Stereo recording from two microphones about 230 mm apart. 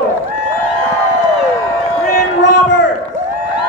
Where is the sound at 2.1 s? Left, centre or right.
Left.